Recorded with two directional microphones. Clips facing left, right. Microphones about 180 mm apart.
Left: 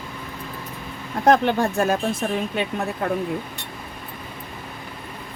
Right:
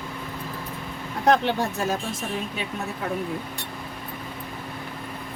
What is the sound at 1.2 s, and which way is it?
Speech, 50° left (ahead or behind).